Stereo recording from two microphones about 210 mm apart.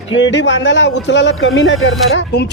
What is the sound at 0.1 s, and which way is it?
Speech, 60° left (ahead or behind).